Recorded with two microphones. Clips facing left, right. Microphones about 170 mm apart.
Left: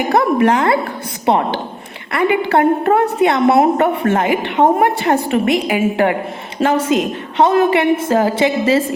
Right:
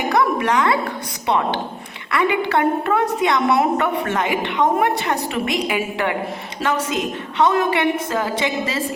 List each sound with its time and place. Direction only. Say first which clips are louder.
0.1 s a woman's voice: left 5 dB; 55° left (ahead or behind)
6.6 s a woman's voice: left 7 dB; 60° left (ahead or behind)
7.4 s a woman's voice: left 5 dB; 40° left (ahead or behind)